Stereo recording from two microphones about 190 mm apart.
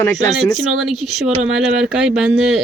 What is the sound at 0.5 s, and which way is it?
Speech, centre (ahead or behind).